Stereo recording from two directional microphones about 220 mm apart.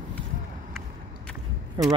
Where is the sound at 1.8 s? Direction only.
20° right (ahead or behind).